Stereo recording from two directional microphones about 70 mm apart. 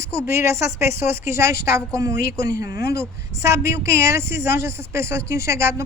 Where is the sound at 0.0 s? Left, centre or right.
Right.